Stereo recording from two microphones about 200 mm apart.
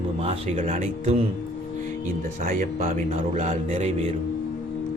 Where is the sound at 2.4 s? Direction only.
45° right (ahead or behind).